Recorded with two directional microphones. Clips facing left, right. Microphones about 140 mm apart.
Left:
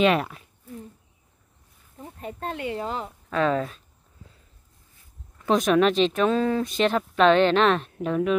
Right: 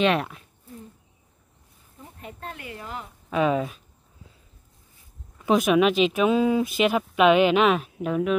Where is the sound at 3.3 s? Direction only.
10° right (ahead or behind).